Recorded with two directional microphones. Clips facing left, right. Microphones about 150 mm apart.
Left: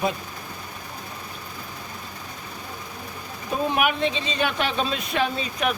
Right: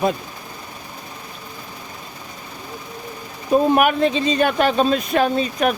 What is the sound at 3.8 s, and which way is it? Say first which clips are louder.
Speech: right 6 dB; 45° right (ahead or behind).